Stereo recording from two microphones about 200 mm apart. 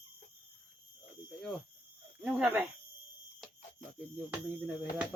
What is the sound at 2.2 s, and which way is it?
Speech, 5° right (ahead or behind).